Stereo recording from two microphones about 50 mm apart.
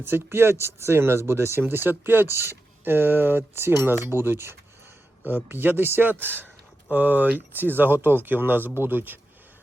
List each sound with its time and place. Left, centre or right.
0.0 s speech: right
5.2 s speech: right